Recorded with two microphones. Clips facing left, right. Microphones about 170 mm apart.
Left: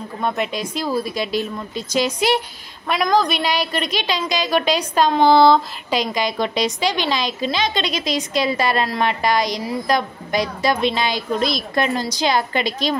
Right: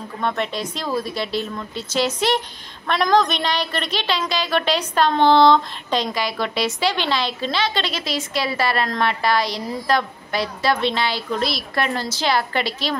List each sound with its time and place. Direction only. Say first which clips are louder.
0.2 s a woman's voice: left 1 dB; 10° left (ahead or behind)